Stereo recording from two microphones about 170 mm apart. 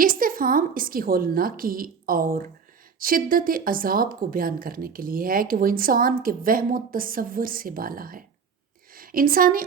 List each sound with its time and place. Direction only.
0.0 s a woman's voice: 55° right (ahead or behind)